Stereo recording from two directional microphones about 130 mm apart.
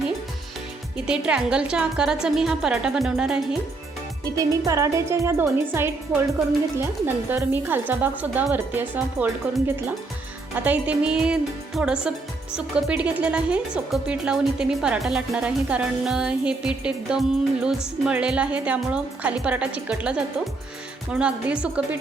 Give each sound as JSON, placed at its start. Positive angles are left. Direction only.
{"t": 0.9, "sound": "a woman's voice", "side_deg": -5}
{"t": 4.4, "sound": "a woman's voice", "side_deg": -25}